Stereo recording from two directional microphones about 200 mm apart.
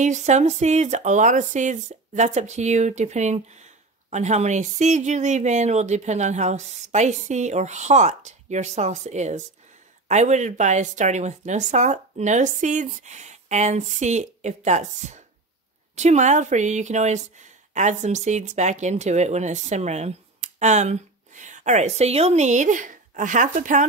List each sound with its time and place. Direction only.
0.0 s speech: 35° right (ahead or behind)